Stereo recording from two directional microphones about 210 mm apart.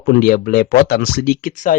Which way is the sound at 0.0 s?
45° left (ahead or behind).